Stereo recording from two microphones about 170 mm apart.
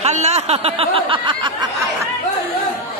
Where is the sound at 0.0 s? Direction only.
40° right (ahead or behind); by 1.9 s 25° right (ahead or behind).